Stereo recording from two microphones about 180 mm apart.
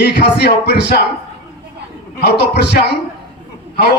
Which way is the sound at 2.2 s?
65° left (ahead or behind).